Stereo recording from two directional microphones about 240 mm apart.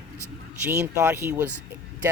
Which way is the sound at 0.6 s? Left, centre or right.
Centre.